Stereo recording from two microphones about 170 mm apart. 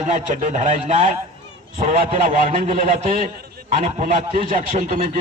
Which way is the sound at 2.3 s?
50° right (ahead or behind).